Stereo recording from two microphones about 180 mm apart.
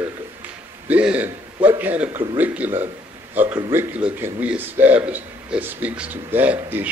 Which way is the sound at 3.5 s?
20° right (ahead or behind).